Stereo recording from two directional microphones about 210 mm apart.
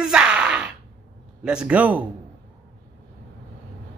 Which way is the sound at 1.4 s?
5° right (ahead or behind).